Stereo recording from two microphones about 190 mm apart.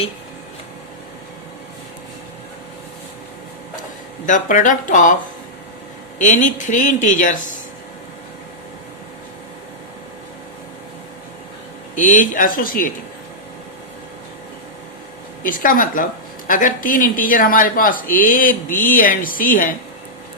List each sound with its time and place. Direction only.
4.3 s speech: 45° left (ahead or behind)
6.1 s speech: 40° left (ahead or behind)
11.9 s speech: 40° left (ahead or behind)
15.4 s speech: 45° left (ahead or behind)